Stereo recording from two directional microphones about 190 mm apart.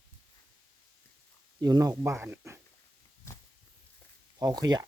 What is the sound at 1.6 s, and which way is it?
Speech, 20° right (ahead or behind).